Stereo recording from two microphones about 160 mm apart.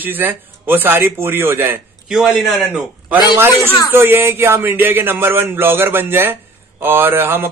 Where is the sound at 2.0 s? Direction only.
Centre (ahead or behind).